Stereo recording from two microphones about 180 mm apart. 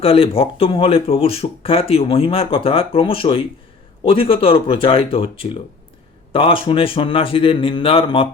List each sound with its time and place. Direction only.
0.0 s speech: 30° left (ahead or behind)